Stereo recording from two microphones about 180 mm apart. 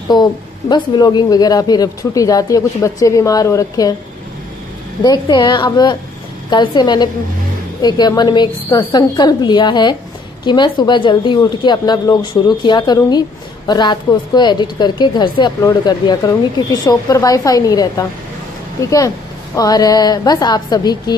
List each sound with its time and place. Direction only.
0.1 s speech: 25° left (ahead or behind)
5.0 s speech: 25° left (ahead or behind)